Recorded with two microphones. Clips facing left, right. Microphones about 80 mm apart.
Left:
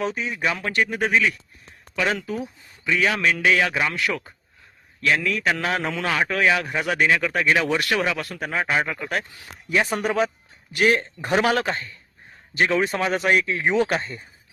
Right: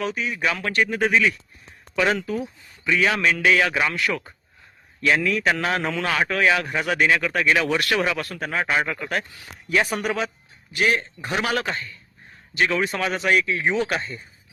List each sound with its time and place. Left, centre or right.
0.0 s a man's voice: left
0.3 s a man's voice: centre
10.2 s a man's voice: left